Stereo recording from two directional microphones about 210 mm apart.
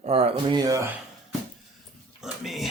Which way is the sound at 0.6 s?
15° right (ahead or behind).